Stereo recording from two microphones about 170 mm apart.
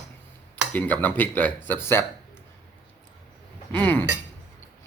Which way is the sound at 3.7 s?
10° left (ahead or behind).